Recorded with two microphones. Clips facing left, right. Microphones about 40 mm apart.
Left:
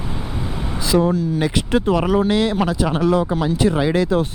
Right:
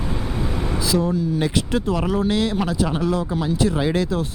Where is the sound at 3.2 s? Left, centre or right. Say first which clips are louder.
Left 3 dB; left.